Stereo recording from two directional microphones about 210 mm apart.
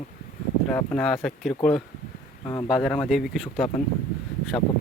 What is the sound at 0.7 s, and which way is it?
Speech, 5° left (ahead or behind).